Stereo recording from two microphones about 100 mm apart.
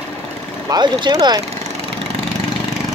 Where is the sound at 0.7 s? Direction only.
45° right (ahead or behind).